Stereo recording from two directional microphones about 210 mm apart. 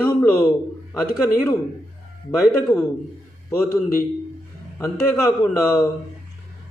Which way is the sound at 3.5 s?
10° left (ahead or behind).